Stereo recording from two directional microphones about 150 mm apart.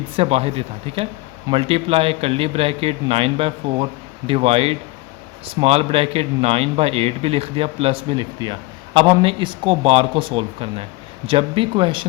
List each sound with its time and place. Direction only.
0.2 s speech: 40° right (ahead or behind)